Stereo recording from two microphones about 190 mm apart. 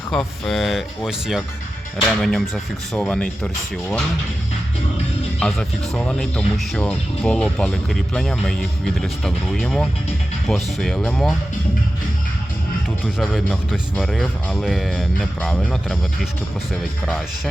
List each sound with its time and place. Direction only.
0.1 s speech: centre (ahead or behind)
5.4 s speech: 5° left (ahead or behind)
13.1 s speech: centre (ahead or behind)